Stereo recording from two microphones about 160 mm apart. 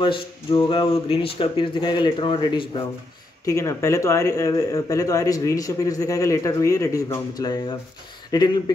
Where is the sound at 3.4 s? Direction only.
20° left (ahead or behind).